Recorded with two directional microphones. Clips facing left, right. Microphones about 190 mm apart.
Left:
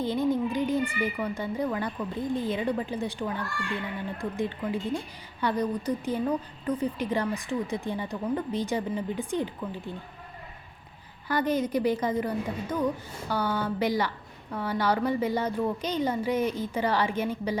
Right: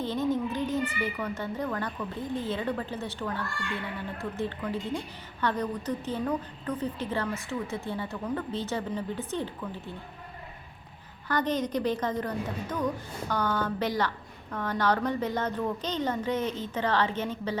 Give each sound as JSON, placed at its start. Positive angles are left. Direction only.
{"t": 0.0, "sound": "a woman's voice", "side_deg": 10}
{"t": 11.3, "sound": "a woman's voice", "side_deg": 10}